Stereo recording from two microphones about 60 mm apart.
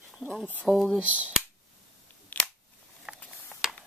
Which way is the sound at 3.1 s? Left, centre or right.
Centre.